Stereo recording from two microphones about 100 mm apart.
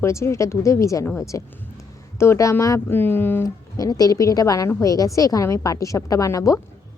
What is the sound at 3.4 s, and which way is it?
A woman's voice, 35° left (ahead or behind).